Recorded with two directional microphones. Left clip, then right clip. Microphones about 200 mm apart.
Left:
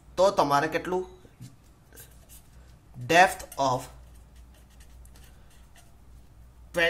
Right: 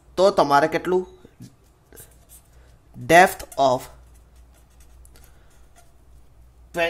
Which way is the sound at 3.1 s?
35° right (ahead or behind).